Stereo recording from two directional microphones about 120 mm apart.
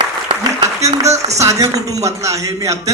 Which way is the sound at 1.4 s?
25° right (ahead or behind).